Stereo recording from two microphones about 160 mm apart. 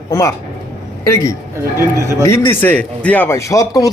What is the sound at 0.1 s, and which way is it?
Speech, 20° left (ahead or behind).